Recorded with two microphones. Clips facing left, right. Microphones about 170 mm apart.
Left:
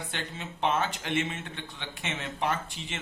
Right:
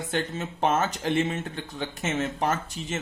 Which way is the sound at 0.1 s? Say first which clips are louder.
Right 9 dB; 45° right (ahead or behind).